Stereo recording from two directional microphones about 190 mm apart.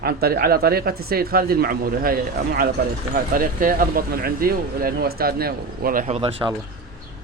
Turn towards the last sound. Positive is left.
turn(degrees=-30)  # may be behind; listen again after turning